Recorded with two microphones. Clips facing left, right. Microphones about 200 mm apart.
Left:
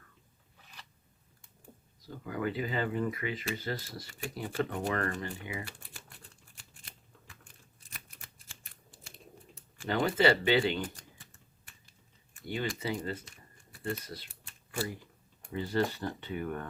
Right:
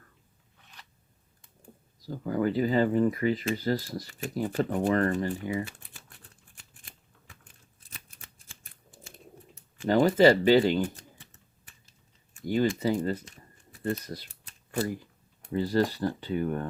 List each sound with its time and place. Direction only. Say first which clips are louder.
2.0 s speech: right 7 dB; 35° right (ahead or behind)
9.8 s speech: right 7 dB; 40° right (ahead or behind)
12.5 s speech: right 9 dB; 40° right (ahead or behind)